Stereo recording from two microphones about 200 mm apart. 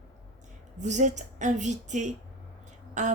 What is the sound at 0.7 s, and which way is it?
A woman's voice, 35° right (ahead or behind).